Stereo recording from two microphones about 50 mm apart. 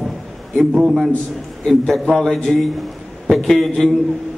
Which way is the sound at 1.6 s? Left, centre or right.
Centre.